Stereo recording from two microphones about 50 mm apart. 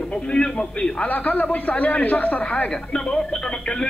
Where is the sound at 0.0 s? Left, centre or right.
Centre.